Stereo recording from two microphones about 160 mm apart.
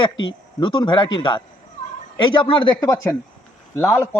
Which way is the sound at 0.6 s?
30° left (ahead or behind).